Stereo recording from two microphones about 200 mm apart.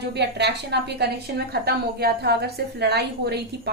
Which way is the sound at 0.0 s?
55° right (ahead or behind).